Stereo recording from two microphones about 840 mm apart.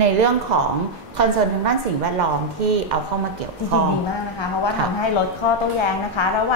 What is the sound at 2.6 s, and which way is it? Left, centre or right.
Speech, right.